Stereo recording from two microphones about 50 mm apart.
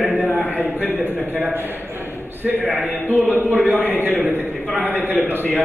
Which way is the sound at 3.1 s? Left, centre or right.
Right.